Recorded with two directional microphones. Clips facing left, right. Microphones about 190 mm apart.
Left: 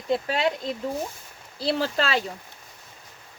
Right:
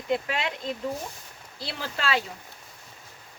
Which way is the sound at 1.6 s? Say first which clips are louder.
Left 6 dB; 40° left (ahead or behind).